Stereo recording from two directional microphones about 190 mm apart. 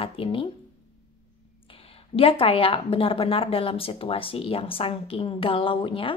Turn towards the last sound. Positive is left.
turn(degrees=25)  # may be behind; listen again after turning